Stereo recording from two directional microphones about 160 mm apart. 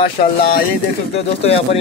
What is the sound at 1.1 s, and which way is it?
Speech, 40° left (ahead or behind).